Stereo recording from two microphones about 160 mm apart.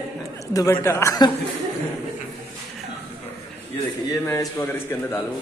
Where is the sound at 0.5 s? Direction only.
20° left (ahead or behind).